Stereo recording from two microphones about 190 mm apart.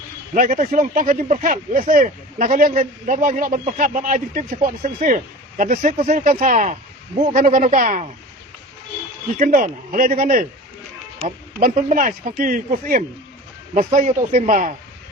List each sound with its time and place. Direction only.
0.3 s speech: 45° right (ahead or behind)
9.4 s speech: 45° right (ahead or behind)